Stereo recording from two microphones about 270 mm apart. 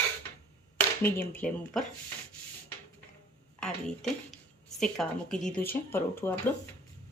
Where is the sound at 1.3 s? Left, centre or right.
Centre.